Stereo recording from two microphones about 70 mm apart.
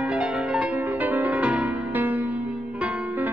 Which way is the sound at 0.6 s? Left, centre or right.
Right.